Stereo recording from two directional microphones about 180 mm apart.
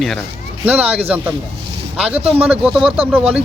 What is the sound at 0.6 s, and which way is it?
Speech, 10° right (ahead or behind).